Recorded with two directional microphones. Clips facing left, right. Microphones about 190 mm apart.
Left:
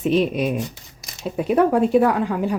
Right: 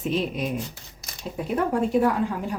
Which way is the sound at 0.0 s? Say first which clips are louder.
Left 7 dB; 70° left (ahead or behind).